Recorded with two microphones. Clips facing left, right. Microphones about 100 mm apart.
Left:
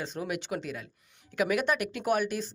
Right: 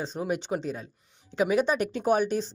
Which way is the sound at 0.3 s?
35° right (ahead or behind).